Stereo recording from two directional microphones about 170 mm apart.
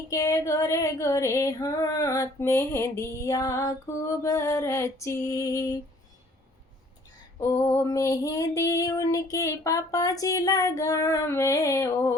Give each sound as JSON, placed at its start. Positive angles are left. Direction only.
{"t": 0.1, "sound": "female singing", "side_deg": 20}
{"t": 7.3, "sound": "female singing", "side_deg": 20}